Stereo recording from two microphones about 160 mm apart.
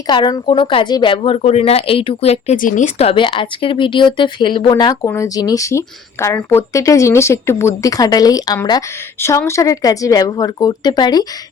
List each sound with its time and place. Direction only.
0.1 s a woman's voice: 25° left (ahead or behind)
9.1 s speech: 15° left (ahead or behind)